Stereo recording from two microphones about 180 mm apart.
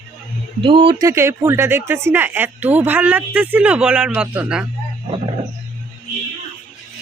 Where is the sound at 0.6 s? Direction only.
30° right (ahead or behind).